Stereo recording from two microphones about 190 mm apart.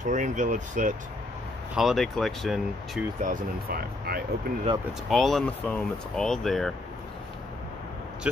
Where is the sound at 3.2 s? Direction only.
50° right (ahead or behind).